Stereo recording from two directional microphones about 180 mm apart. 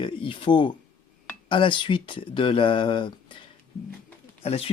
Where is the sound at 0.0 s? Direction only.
30° left (ahead or behind).